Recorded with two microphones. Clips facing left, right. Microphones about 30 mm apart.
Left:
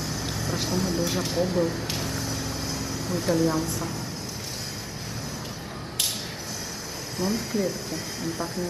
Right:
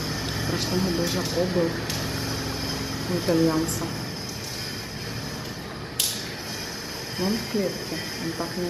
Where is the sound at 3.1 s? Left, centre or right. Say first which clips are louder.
Right 2 dB; right.